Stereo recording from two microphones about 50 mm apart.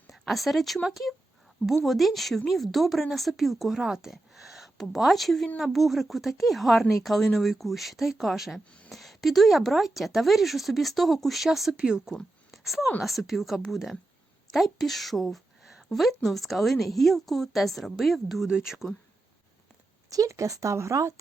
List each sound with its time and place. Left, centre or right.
0.1 s speech: centre
11.8 s speech: centre
12.5 s a sound: centre
13.0 s a woman's voice: centre
18.4 s speech: centre
20.1 s speech: right